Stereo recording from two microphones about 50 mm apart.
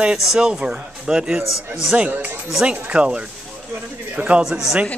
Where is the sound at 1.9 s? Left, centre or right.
Right.